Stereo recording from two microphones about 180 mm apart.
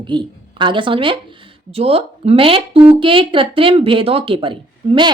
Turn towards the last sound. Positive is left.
turn(degrees=-25)  # may be behind; listen again after turning